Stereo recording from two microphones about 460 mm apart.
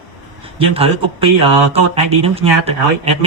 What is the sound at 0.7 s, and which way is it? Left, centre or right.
Speech, centre.